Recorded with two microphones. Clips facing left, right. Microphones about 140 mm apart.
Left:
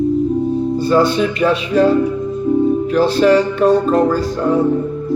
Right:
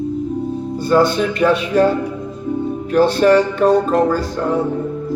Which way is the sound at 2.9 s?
50° right (ahead or behind).